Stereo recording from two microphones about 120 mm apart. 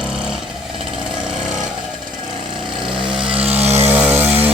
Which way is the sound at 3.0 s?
45° right (ahead or behind).